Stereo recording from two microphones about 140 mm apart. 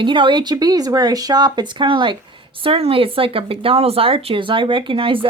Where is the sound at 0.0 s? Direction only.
35° right (ahead or behind).